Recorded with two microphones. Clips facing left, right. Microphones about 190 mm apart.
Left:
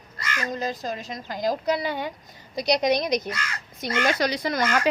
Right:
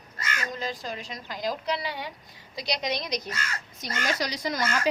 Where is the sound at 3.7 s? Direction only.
55° left (ahead or behind).